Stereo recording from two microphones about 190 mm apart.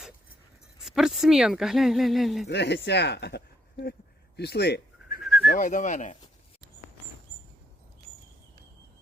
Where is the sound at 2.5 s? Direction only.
65° left (ahead or behind).